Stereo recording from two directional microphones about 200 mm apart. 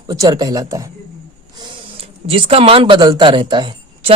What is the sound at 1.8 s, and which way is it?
Speech, 30° right (ahead or behind).